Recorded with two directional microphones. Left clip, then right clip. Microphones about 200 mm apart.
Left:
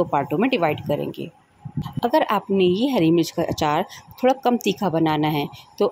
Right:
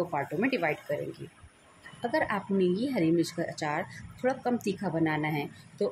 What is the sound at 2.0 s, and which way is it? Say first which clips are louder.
A woman's voice: left 10 dB; 35° left (ahead or behind).